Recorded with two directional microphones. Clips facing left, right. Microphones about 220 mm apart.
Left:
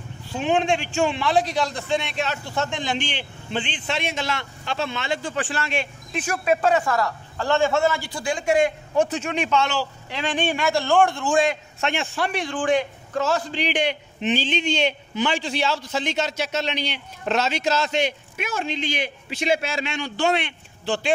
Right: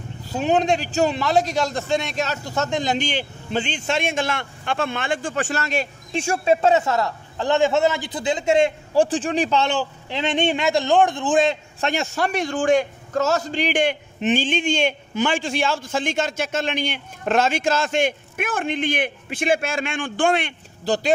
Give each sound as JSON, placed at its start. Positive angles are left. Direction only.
{"t": 0.3, "sound": "a man's voice", "side_deg": -40}
{"t": 6.1, "sound": "a man's voice", "side_deg": -30}
{"t": 11.8, "sound": "a man's voice", "side_deg": -40}